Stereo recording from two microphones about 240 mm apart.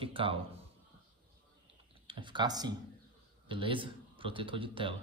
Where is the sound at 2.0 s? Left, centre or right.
Centre.